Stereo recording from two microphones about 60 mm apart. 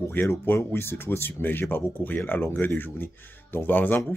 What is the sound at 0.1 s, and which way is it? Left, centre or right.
Speech, left.